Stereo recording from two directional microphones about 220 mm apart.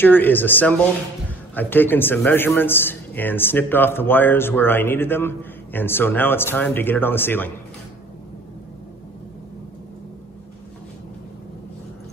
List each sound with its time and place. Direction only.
0.0 s a man's voice: 10° left (ahead or behind)